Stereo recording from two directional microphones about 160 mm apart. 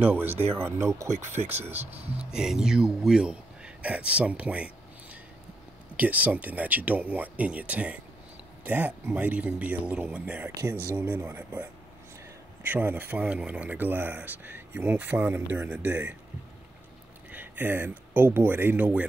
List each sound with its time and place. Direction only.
0.0 s speech: 10° right (ahead or behind)
1.9 s speech: 40° right (ahead or behind)
2.3 s speech: 5° right (ahead or behind)
5.9 s speech: 10° right (ahead or behind)
12.6 s speech: 10° right (ahead or behind)
17.3 s speech: 10° right (ahead or behind)